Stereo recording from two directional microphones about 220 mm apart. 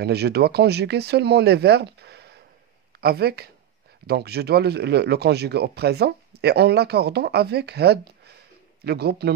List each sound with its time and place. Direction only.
0.0 s speech: 50° right (ahead or behind)